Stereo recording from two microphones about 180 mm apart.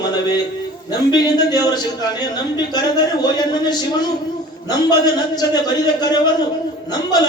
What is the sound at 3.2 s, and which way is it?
Speech, 20° left (ahead or behind).